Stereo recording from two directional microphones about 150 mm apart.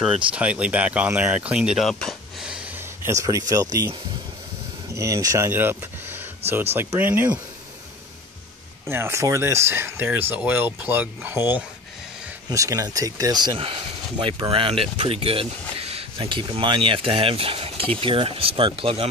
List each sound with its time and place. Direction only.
0.0 s speech: 5° right (ahead or behind)
2.8 s speech: 20° right (ahead or behind)
4.9 s speech: 20° right (ahead or behind)
8.8 s speech: 15° right (ahead or behind); by 19.0 s 35° right (ahead or behind)